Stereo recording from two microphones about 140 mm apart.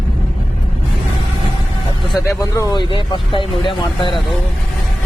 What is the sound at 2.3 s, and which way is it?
Speech, 30° left (ahead or behind).